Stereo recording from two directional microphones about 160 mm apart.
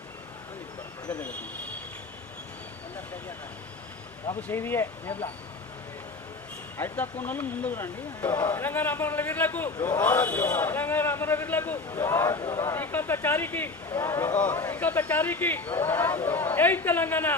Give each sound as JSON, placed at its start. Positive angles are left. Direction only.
{"t": 4.4, "sound": "a man's voice", "side_deg": 15}
{"t": 6.7, "sound": "a man's voice", "side_deg": 15}
{"t": 9.7, "sound": "speech", "side_deg": 25}
{"t": 10.0, "sound": "a man's voice", "side_deg": 10}